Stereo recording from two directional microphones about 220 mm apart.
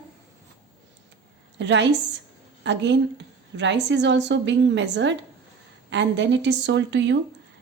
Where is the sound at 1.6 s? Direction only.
55° right (ahead or behind).